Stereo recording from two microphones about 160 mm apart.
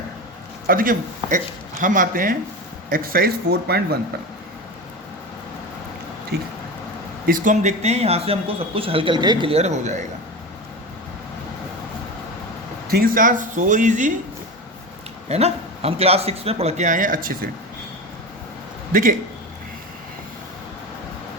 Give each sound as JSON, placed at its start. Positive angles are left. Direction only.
{"t": 0.7, "sound": "speech", "side_deg": -60}
{"t": 6.3, "sound": "speech", "side_deg": -80}
{"t": 7.3, "sound": "speech", "side_deg": -55}
{"t": 12.9, "sound": "speech", "side_deg": -65}
{"t": 15.3, "sound": "speech", "side_deg": -40}